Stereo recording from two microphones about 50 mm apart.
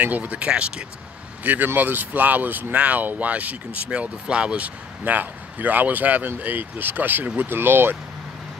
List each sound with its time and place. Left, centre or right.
0.0 s speech: right
1.4 s speech: right